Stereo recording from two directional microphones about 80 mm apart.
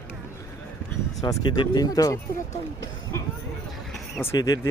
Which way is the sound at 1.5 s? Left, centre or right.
Left.